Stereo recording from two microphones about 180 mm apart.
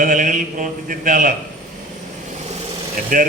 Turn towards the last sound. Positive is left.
turn(degrees=-50)  # may be behind; listen again after turning